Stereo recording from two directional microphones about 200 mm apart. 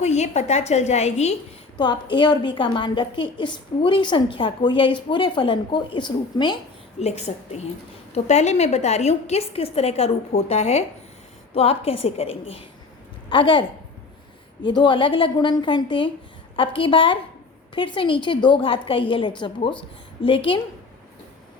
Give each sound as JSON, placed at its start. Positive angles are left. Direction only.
{"t": 0.0, "sound": "a woman's voice", "side_deg": 35}
{"t": 1.8, "sound": "a woman's voice", "side_deg": 25}
{"t": 7.0, "sound": "a woman's voice", "side_deg": 35}
{"t": 14.7, "sound": "a woman's voice", "side_deg": 25}